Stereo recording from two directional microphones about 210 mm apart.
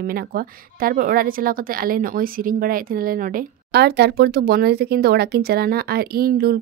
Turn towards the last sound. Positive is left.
turn(degrees=-45)  # may be behind; listen again after turning